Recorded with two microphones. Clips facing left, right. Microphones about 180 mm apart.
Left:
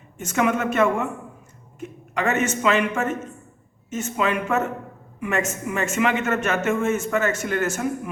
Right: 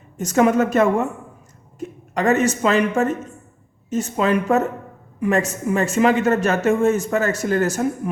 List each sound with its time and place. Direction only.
0.2 s a man's voice: 40° right (ahead or behind)